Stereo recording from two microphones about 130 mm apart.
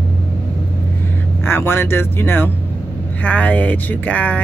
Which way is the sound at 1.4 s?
15° left (ahead or behind).